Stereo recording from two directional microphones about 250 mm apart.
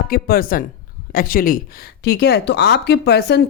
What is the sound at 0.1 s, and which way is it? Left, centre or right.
A woman's voice, left.